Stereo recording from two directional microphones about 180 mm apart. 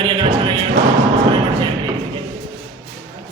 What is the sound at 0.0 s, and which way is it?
Music, 30° right (ahead or behind).